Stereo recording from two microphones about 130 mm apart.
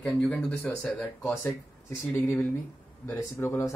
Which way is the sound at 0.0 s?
10° left (ahead or behind).